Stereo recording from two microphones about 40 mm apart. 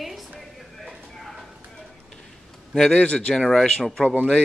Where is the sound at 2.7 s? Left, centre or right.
Centre.